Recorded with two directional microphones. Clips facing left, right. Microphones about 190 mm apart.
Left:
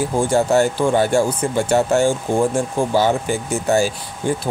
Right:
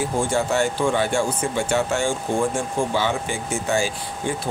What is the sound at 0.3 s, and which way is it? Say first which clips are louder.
Speech: left 6 dB; 40° left (ahead or behind).